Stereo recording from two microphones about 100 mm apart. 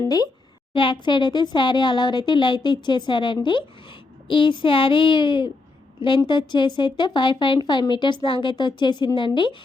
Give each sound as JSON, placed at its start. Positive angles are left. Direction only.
{"t": 0.7, "sound": "a child's voice", "side_deg": 55}